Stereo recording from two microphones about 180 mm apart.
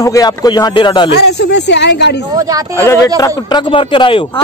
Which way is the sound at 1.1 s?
70° left (ahead or behind).